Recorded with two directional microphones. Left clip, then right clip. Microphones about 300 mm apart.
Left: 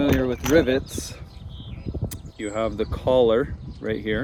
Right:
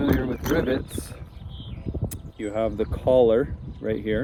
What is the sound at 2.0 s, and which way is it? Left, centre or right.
Speech, centre.